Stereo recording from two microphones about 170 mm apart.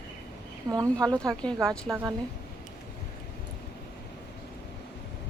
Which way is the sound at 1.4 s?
5° left (ahead or behind).